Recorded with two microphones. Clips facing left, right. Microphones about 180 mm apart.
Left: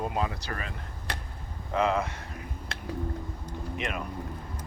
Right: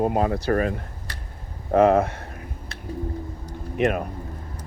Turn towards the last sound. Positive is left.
turn(degrees=-50)  # may be behind; listen again after turning